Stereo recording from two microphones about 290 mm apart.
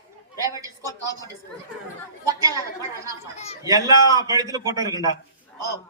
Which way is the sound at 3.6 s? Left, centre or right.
Centre.